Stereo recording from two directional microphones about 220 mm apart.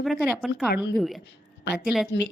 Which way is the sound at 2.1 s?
55° left (ahead or behind).